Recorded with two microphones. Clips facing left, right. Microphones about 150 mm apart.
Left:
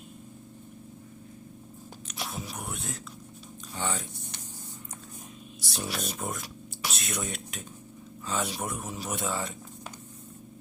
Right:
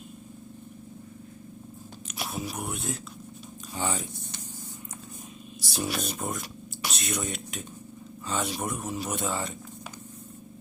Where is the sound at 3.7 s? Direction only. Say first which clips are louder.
Right 2 dB; 10° right (ahead or behind).